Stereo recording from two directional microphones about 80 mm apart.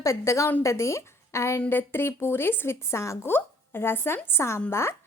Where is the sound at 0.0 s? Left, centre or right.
Left.